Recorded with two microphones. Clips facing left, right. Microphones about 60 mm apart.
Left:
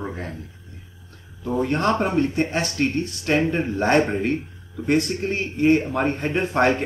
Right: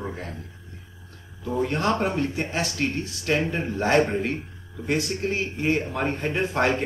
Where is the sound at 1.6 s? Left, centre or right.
Centre.